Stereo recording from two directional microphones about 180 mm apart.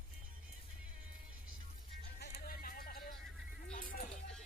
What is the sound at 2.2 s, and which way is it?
Music, 60° left (ahead or behind).